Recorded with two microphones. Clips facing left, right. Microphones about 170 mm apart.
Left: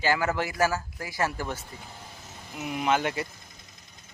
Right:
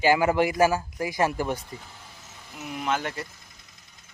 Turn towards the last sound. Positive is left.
turn(degrees=0)  # may be behind; listen again after turning